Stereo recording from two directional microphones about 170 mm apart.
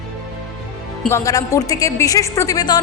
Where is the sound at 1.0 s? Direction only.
15° left (ahead or behind).